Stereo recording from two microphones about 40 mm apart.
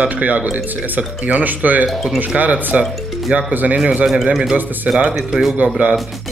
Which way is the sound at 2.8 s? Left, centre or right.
Centre.